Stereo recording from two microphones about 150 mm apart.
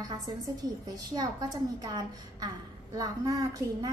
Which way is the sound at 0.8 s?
25° right (ahead or behind).